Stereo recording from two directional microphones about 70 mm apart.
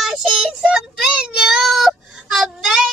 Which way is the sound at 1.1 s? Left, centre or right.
Centre.